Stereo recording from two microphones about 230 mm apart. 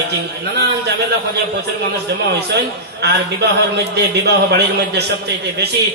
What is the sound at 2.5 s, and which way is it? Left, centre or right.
A man's voice, right.